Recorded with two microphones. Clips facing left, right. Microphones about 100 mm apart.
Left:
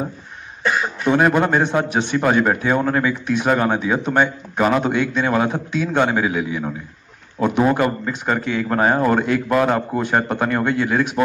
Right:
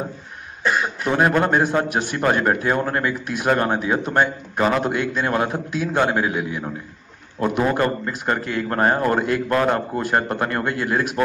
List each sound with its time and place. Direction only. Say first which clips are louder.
0.7 s a man's voice: left 2 dB; centre (ahead or behind)